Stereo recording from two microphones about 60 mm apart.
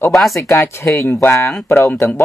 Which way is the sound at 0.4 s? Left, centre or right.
Left.